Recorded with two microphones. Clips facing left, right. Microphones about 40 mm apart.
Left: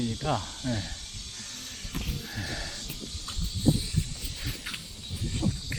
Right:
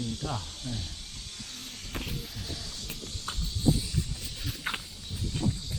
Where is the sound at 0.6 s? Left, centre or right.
Left.